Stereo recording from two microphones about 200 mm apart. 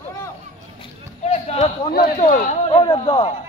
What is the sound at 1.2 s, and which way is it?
Speech, 30° left (ahead or behind).